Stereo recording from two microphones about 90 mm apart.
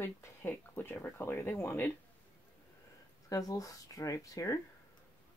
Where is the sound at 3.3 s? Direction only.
40° left (ahead or behind).